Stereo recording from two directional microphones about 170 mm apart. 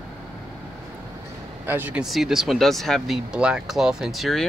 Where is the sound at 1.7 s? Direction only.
10° right (ahead or behind).